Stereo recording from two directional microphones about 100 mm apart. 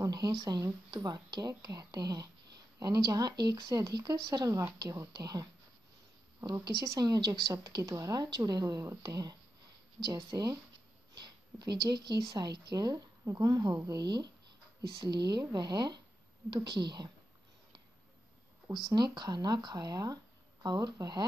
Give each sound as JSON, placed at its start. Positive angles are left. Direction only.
{"t": 0.0, "sound": "a sound", "side_deg": -45}
{"t": 0.4, "sound": "a woman's voice", "side_deg": -45}
{"t": 7.0, "sound": "a woman's voice", "side_deg": -40}
{"t": 18.7, "sound": "speech", "side_deg": -45}